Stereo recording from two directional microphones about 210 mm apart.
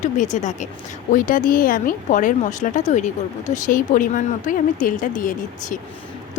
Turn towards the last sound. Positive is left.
turn(degrees=40)  # may be behind; listen again after turning